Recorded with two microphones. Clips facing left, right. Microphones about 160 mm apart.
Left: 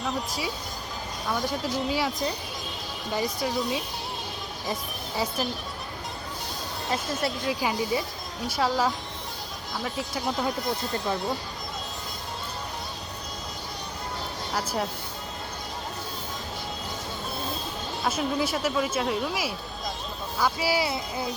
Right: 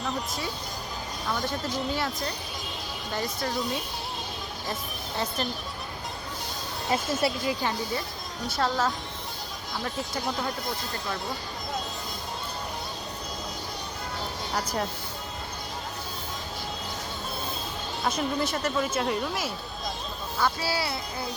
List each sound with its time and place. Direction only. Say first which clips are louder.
0.0 s speech: left 1 dB; 5° left (ahead or behind)
6.9 s speech: right 3 dB; 5° right (ahead or behind)
7.6 s speech: left 3 dB; 10° left (ahead or behind)
14.5 s speech: left 1 dB; centre (ahead or behind)
18.0 s speech: left 1 dB; 5° left (ahead or behind)